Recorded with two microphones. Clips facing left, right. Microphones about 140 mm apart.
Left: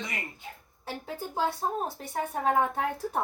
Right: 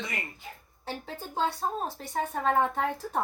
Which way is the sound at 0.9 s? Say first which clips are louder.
Left 1 dB; 10° left (ahead or behind).